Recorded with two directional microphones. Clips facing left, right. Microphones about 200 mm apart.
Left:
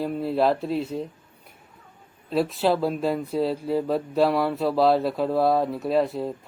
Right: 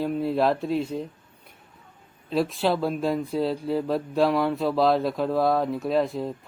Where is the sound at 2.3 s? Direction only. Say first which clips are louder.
Left 1 dB; centre (ahead or behind).